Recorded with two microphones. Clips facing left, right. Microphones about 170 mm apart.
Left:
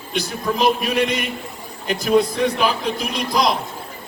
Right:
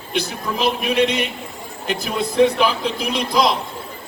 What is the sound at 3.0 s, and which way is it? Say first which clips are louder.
Speech: right 4 dB; 50° left (ahead or behind).